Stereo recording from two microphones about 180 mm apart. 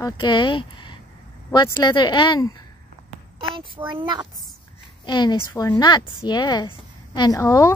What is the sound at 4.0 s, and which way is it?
Speech, 25° right (ahead or behind).